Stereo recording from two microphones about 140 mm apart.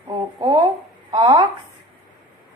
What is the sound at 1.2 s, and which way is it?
Speech, 35° right (ahead or behind).